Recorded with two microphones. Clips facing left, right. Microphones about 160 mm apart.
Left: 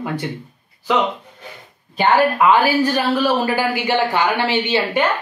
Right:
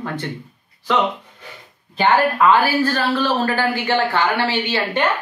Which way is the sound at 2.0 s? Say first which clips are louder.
Left 1 dB; 10° left (ahead or behind).